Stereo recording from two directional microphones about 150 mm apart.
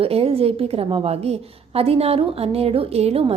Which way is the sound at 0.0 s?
40° right (ahead or behind).